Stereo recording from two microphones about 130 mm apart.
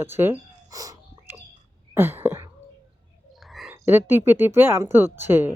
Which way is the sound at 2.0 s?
15° right (ahead or behind).